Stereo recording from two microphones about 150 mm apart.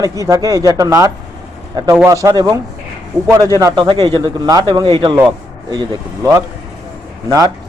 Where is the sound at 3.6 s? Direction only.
30° right (ahead or behind).